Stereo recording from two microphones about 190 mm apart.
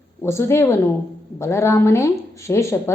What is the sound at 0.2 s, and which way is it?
A woman's voice, 15° left (ahead or behind).